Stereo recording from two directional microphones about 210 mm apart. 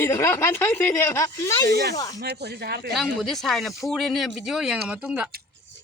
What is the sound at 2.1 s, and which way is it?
Speech, 55° right (ahead or behind).